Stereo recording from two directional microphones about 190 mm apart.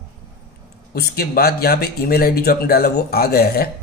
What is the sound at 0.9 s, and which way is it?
Speech, 55° left (ahead or behind).